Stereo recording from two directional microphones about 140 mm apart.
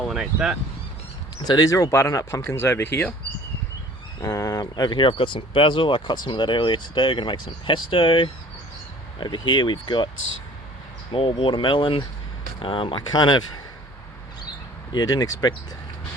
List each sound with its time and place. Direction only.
0.1 s speech: 5° right (ahead or behind)
1.5 s speech: 25° left (ahead or behind)
4.2 s speech: 25° left (ahead or behind)
11.1 s speech: 40° left (ahead or behind)
14.9 s speech: 25° left (ahead or behind)